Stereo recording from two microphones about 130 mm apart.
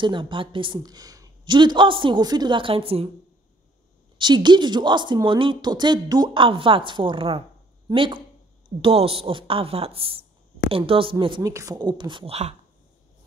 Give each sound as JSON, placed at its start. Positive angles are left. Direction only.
{"t": 0.0, "sound": "a woman's voice", "side_deg": -40}
{"t": 4.2, "sound": "a woman's voice", "side_deg": -35}
{"t": 11.4, "sound": "a woman's voice", "side_deg": -25}